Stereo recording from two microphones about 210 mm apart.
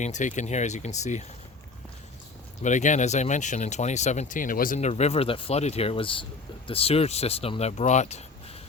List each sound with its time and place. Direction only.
0.0 s speech: 35° left (ahead or behind)
2.6 s speech: 35° left (ahead or behind)